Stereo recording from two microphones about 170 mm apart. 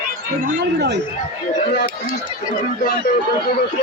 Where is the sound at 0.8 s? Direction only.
90° right.